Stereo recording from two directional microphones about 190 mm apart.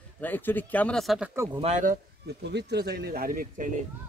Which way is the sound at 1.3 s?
15° right (ahead or behind).